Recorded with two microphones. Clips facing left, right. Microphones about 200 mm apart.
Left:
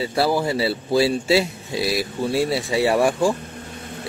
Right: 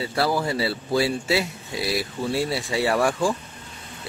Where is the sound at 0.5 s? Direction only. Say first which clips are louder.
Left 3 dB; 25° left (ahead or behind).